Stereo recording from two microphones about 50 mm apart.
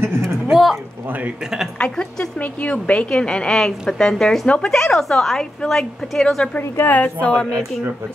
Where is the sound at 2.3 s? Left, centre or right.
Left.